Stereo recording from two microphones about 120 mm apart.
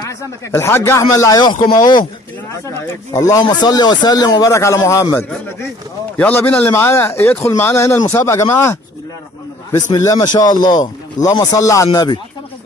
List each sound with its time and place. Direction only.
0.5 s a man's voice: 20° left (ahead or behind)
6.1 s a man's voice: 15° left (ahead or behind); by 12.2 s 30° left (ahead or behind)